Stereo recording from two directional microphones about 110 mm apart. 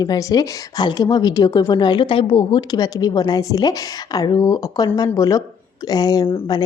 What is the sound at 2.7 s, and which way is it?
A woman's voice, 35° left (ahead or behind).